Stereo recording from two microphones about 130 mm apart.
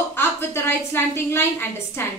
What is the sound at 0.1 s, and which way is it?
A woman's voice, 20° left (ahead or behind).